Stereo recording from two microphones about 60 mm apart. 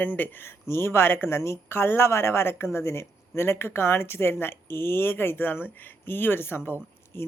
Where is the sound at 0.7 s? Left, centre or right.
Left.